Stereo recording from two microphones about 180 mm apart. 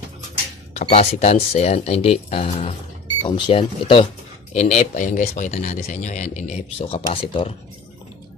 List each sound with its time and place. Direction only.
0.8 s speech: 35° left (ahead or behind)
4.5 s speech: 40° left (ahead or behind)